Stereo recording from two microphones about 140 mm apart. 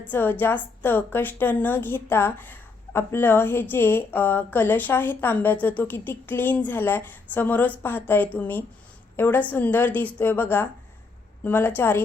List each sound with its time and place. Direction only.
0.0 s a woman's voice: 15° left (ahead or behind)